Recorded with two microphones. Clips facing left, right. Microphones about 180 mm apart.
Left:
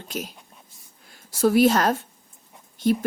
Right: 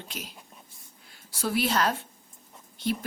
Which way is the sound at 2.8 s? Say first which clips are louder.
Left 8 dB; 45° left (ahead or behind).